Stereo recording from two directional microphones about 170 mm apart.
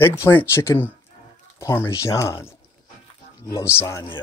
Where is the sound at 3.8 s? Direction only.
15° left (ahead or behind).